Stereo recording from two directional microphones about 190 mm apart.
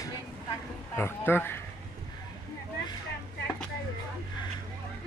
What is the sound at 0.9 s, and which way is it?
Speech, 10° left (ahead or behind).